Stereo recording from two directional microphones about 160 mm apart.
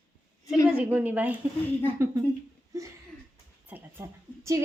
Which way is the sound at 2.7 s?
20° right (ahead or behind).